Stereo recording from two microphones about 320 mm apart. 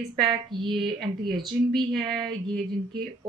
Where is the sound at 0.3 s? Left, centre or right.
Centre.